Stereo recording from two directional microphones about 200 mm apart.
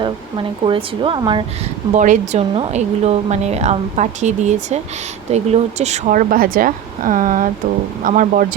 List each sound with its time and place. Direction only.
0.0 s speech: 25° right (ahead or behind)
2.0 s speech: 35° right (ahead or behind)